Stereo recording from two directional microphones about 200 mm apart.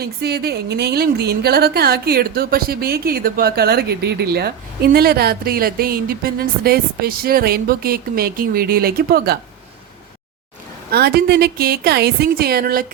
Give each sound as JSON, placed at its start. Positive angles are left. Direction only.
{"t": 0.0, "sound": "a woman's voice", "side_deg": -55}
{"t": 10.9, "sound": "a woman's voice", "side_deg": -50}